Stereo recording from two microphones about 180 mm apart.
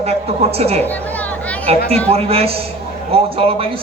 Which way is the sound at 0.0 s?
35° right (ahead or behind).